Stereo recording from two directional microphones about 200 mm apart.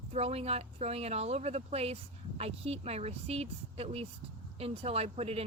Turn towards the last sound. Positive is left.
turn(degrees=-30)  # may be behind; listen again after turning